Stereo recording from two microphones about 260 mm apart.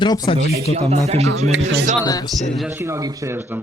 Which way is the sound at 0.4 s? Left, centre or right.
Right.